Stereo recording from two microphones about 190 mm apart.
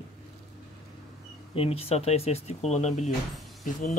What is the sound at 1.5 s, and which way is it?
Speech, 30° left (ahead or behind).